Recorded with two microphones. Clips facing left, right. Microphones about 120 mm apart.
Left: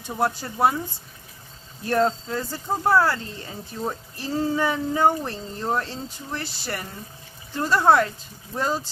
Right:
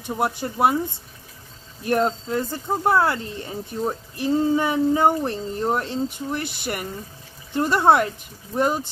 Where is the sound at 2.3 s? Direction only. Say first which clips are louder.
Right 3 dB; 20° right (ahead or behind).